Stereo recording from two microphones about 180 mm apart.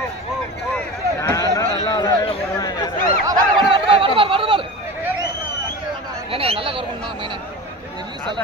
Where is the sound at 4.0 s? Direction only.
30° right (ahead or behind).